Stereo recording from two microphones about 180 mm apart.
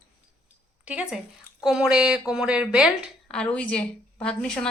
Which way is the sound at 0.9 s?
5° right (ahead or behind).